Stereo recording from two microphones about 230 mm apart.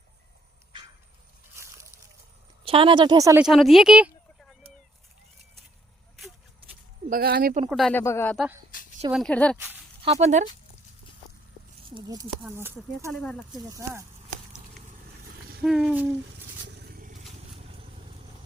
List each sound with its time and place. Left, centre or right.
1.6 s slosh: centre
2.6 s speech: right
3.4 s speech: centre
7.1 s speech: right
7.7 s speech: centre
10.0 s speech: right
11.9 s speech: centre
13.1 s speech: centre
13.6 s speech: centre
15.6 s speech: centre
16.6 s vehicle: right